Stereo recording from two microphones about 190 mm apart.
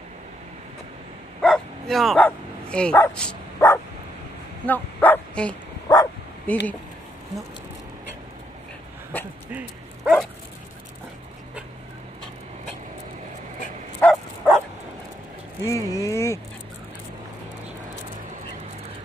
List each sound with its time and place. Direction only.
1.4 s dog: centre (ahead or behind)
4.6 s bow-wow: 10° left (ahead or behind)
9.1 s speech: 10° left (ahead or behind)
9.5 s dog: 5° right (ahead or behind)
14.0 s bow-wow: 10° left (ahead or behind)
15.6 s speech: 15° left (ahead or behind)